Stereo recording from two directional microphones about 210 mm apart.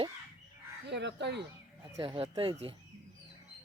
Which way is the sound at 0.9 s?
55° right (ahead or behind).